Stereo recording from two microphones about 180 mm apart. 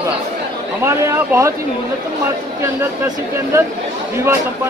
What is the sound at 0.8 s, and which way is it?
Speech, 15° right (ahead or behind).